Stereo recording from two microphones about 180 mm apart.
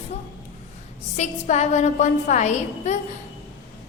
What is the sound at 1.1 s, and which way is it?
A woman's voice, 40° left (ahead or behind).